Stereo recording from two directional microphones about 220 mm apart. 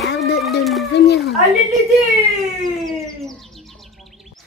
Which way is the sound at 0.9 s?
50° left (ahead or behind).